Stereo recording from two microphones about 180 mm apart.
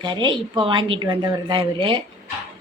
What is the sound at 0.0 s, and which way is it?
A woman's voice, 25° right (ahead or behind).